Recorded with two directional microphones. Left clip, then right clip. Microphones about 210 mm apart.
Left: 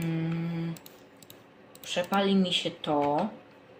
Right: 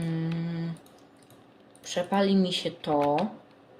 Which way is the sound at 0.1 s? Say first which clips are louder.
Even; 20° right (ahead or behind).